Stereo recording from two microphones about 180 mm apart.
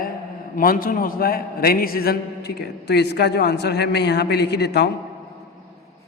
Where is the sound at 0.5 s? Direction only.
50° left (ahead or behind); by 4.9 s 70° left (ahead or behind).